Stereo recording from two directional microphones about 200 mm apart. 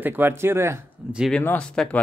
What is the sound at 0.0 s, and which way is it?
Speech, 10° right (ahead or behind).